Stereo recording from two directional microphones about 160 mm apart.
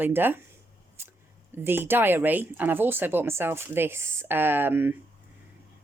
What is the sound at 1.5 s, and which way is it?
Speech, 15° right (ahead or behind).